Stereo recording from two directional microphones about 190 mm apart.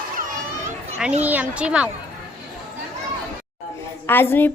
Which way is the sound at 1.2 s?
10° right (ahead or behind).